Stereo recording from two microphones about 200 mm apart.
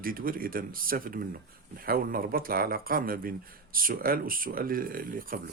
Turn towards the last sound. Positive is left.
turn(degrees=-45)  # may be behind; listen again after turning